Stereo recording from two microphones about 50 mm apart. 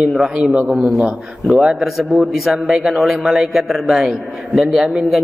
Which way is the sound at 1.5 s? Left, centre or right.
Centre.